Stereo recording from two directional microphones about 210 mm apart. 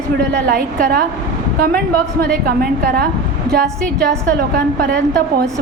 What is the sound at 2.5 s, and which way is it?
Speech, 45° right (ahead or behind).